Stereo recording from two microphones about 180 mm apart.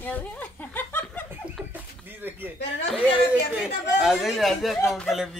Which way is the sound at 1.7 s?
10° right (ahead or behind).